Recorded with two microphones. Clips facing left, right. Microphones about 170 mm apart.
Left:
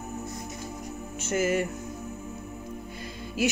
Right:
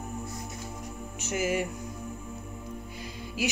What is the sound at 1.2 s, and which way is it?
Speech, 10° right (ahead or behind).